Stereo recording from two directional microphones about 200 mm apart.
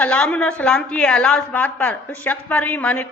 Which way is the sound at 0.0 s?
5° left (ahead or behind).